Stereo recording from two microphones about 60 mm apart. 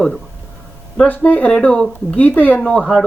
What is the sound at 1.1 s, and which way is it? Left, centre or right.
Speech, left.